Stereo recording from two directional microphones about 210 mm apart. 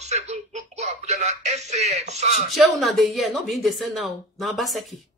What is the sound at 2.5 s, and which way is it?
Speech, centre (ahead or behind).